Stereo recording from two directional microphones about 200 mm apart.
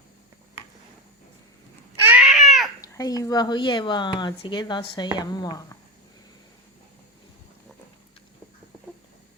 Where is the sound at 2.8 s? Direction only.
20° left (ahead or behind).